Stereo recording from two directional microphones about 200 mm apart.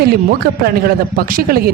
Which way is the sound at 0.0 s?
50° right (ahead or behind).